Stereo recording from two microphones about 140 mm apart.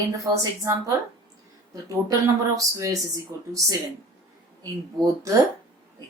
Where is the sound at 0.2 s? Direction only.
25° right (ahead or behind).